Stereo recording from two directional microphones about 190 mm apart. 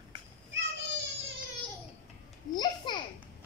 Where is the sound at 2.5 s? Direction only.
20° left (ahead or behind).